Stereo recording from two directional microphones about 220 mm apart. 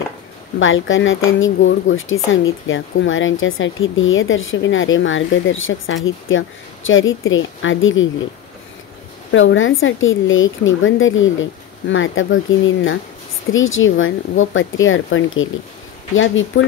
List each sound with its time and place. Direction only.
0.6 s speech: 60° left (ahead or behind)
9.3 s speech: 60° left (ahead or behind)